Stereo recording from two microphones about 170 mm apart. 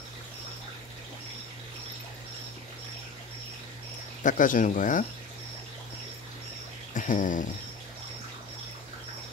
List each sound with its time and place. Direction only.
4.2 s speech: 50° left (ahead or behind)
6.9 s dog: 50° left (ahead or behind)